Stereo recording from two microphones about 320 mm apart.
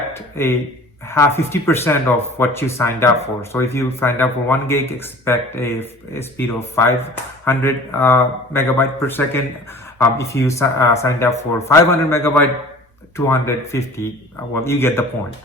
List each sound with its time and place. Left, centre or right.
0.4 s speech: centre